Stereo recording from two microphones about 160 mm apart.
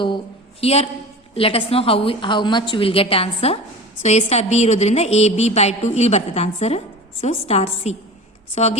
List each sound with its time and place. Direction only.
0.6 s a woman's voice: 40° left (ahead or behind)